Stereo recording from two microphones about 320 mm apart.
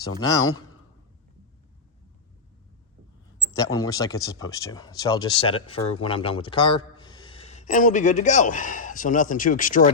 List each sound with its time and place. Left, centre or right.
3.5 s speech: centre